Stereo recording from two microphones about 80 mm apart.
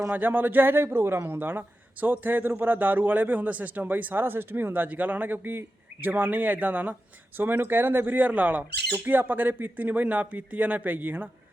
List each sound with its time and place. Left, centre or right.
0.1 s speech: right